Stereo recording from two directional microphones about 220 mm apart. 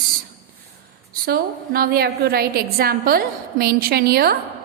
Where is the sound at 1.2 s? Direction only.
45° right (ahead or behind).